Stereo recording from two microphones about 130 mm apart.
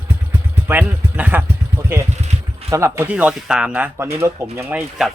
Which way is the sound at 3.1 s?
5° right (ahead or behind).